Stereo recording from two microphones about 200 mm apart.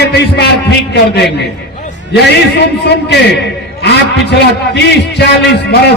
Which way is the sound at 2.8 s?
55° left (ahead or behind).